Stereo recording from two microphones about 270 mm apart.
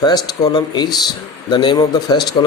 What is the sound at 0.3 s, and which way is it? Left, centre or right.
Speech, centre.